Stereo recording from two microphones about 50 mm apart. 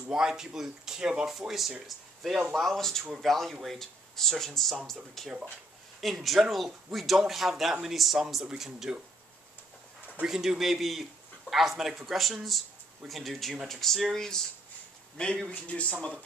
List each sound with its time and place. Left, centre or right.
0.1 s speech: centre
1.9 s a man's voice: centre
10.2 s a man's voice: centre; by 15.9 s left